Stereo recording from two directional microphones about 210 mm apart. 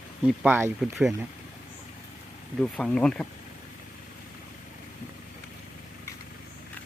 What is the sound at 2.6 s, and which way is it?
Speech, 5° left (ahead or behind).